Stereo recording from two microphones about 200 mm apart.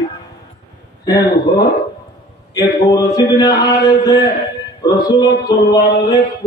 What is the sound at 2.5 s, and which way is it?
A man's voice, 20° left (ahead or behind).